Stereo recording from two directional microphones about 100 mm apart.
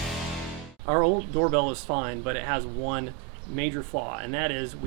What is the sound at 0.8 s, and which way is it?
Speech, 15° right (ahead or behind).